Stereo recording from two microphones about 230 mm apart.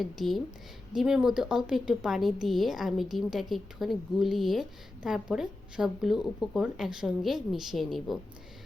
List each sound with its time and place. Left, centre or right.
0.0 s speech: centre